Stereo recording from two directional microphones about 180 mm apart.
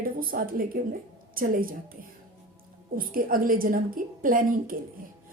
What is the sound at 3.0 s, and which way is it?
A woman's voice, 50° right (ahead or behind).